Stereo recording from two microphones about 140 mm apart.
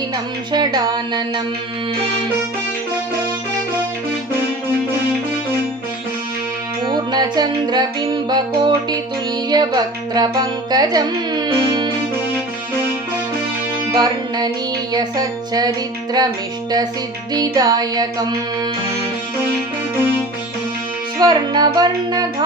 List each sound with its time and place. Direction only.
0.5 s music: 30° right (ahead or behind)
6.9 s music: 30° right (ahead or behind)
9.5 s speech: 30° right (ahead or behind)
13.9 s music: 30° right (ahead or behind)
17.3 s music: 30° right (ahead or behind)
21.2 s music: 30° right (ahead or behind)